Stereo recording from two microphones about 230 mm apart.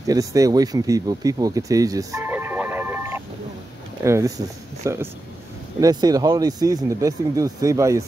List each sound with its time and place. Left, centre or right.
0.0 s speech: centre